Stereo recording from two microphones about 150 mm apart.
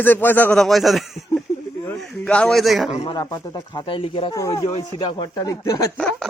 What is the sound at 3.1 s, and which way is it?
Speech, 25° left (ahead or behind).